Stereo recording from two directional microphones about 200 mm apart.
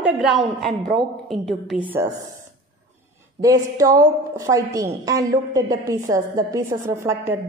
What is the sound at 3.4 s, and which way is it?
A woman's voice, 15° right (ahead or behind).